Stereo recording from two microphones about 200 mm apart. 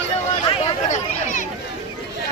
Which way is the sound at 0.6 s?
35° left (ahead or behind).